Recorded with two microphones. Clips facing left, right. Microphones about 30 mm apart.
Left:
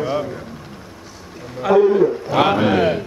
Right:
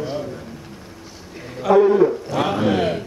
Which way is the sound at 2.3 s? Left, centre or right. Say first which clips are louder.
Left 4 dB; left.